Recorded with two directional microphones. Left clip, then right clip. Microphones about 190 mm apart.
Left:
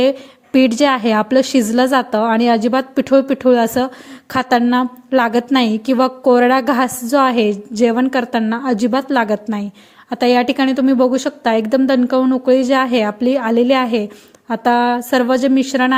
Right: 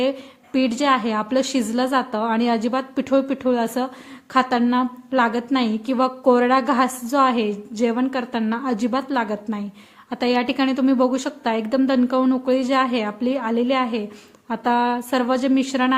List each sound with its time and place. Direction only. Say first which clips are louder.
0.0 s a woman's voice: left 7 dB; 30° left (ahead or behind)